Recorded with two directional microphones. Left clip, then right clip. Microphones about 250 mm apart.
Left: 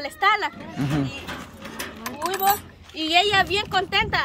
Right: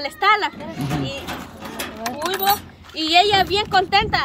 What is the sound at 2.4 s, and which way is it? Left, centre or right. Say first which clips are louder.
A woman's voice: right 1 dB; centre.